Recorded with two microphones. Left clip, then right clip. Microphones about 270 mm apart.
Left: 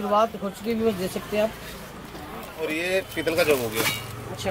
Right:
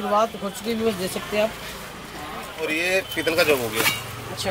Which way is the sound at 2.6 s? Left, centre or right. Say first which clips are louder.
Right 3 dB; centre.